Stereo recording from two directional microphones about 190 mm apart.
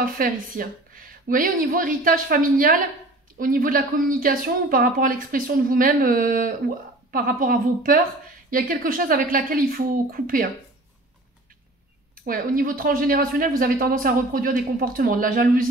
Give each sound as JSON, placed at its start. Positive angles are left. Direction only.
{"t": 0.0, "sound": "speech", "side_deg": -45}
{"t": 12.2, "sound": "speech", "side_deg": -50}